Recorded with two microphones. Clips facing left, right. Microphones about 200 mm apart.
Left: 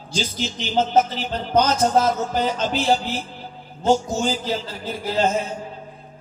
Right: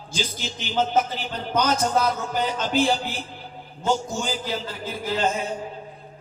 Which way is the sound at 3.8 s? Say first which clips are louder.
Left 5 dB; 45° left (ahead or behind).